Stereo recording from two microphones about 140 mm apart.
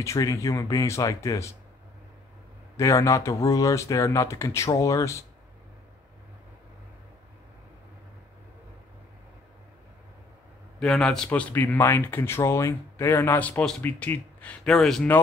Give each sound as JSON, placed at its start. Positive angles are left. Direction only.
{"t": 0.0, "sound": "speech", "side_deg": 20}
{"t": 2.8, "sound": "speech", "side_deg": 20}
{"t": 10.8, "sound": "speech", "side_deg": 5}